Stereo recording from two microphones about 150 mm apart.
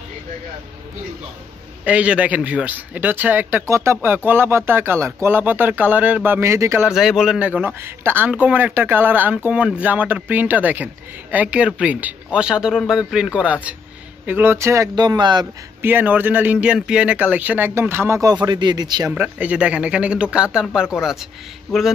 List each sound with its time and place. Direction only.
1.9 s a man's voice: 10° right (ahead or behind)
6.8 s a man's voice: 5° right (ahead or behind); by 15.4 s 30° right (ahead or behind)
15.8 s a man's voice: 10° right (ahead or behind)
19.1 s a man's voice: 10° right (ahead or behind)